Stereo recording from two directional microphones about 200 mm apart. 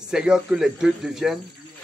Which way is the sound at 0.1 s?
5° right (ahead or behind).